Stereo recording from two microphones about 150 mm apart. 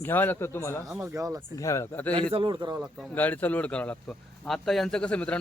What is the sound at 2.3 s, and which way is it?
Speech, 30° right (ahead or behind).